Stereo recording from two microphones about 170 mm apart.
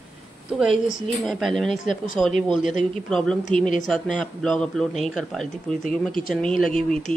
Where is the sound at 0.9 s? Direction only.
Centre (ahead or behind).